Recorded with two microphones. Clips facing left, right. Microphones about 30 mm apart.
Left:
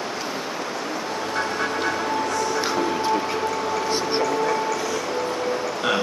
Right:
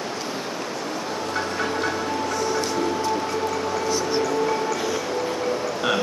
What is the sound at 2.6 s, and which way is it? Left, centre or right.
Music, left.